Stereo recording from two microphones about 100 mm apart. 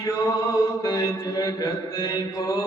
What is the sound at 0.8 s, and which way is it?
Mantra, 35° left (ahead or behind).